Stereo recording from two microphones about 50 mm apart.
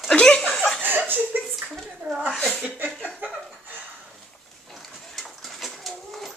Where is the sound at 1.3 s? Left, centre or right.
Right.